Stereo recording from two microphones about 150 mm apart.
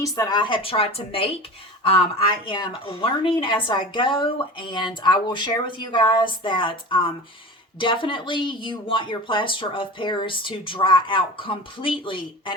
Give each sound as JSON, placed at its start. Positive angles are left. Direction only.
{"t": 0.0, "sound": "speech", "side_deg": 25}